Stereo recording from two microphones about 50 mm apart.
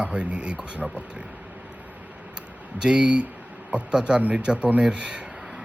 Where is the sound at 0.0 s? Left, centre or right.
Right.